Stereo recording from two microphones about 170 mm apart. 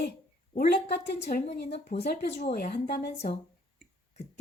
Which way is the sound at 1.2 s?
40° left (ahead or behind).